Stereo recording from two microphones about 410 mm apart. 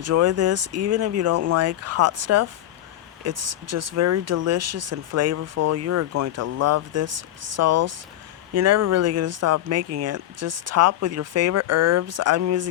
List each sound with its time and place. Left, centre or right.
0.0 s speech: right